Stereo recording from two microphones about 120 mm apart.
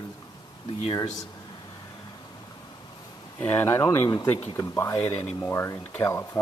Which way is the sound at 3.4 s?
15° left (ahead or behind).